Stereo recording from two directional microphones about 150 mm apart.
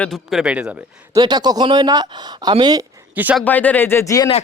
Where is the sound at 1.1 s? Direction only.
25° right (ahead or behind).